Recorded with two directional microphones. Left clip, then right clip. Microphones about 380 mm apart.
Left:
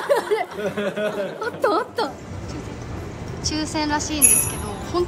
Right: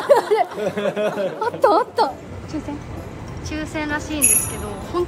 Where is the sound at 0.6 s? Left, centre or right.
Right.